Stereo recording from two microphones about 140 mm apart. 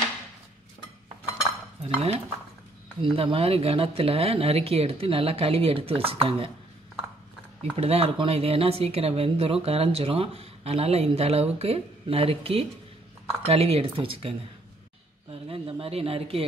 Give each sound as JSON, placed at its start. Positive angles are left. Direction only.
{"t": 1.8, "sound": "speech", "side_deg": -45}
{"t": 7.7, "sound": "speech", "side_deg": -45}
{"t": 15.4, "sound": "speech", "side_deg": -45}